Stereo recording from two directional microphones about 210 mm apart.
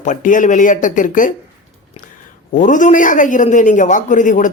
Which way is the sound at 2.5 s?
40° left (ahead or behind).